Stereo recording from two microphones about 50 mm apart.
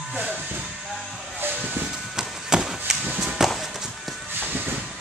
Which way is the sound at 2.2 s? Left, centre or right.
Centre.